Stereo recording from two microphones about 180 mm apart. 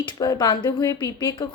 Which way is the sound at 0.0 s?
25° left (ahead or behind).